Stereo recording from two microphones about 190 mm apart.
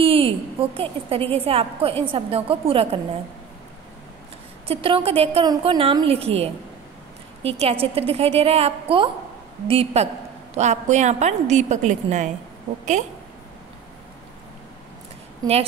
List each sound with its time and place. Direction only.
0.0 s a woman's voice: 30° right (ahead or behind)
4.6 s a woman's voice: 30° right (ahead or behind)